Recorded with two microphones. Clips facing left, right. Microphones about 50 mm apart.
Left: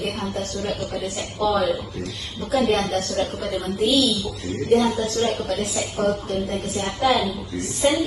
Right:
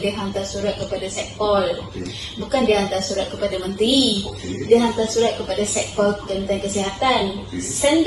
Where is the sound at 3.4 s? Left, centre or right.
Right.